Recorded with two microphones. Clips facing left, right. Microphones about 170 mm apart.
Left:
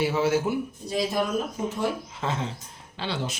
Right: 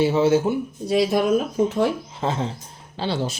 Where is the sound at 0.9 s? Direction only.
70° right (ahead or behind).